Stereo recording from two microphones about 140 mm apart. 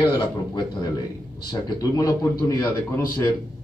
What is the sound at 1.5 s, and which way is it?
A man's voice, 25° left (ahead or behind).